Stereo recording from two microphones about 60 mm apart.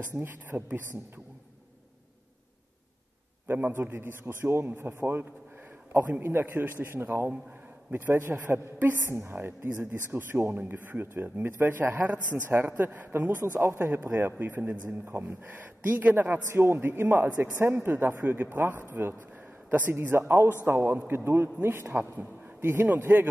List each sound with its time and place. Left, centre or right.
0.1 s a man's voice: right
3.5 s a man's voice: right
6.9 s a man's voice: right
13.5 s a man's voice: right